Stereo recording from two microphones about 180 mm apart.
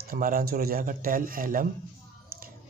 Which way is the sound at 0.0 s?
50° right (ahead or behind).